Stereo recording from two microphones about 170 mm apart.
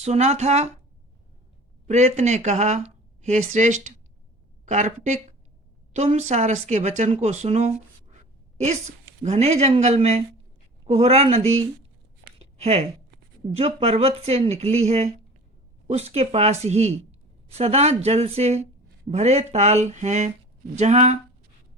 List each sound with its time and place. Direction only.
0.0 s speech: 40° right (ahead or behind)
1.9 s speech: 40° right (ahead or behind)
8.1 s a sound: 40° right (ahead or behind)
9.2 s speech: 40° right (ahead or behind)
12.4 s a sound: 35° right (ahead or behind)
13.6 s speech: 35° right (ahead or behind)